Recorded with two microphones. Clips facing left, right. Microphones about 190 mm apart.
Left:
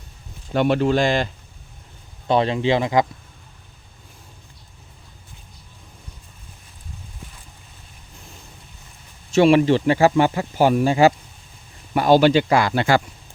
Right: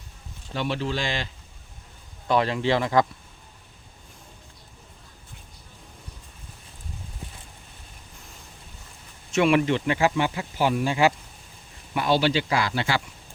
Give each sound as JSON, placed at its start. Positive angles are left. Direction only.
{"t": 0.5, "sound": "speech", "side_deg": 55}
{"t": 2.2, "sound": "speech", "side_deg": 25}
{"t": 9.3, "sound": "speech", "side_deg": 30}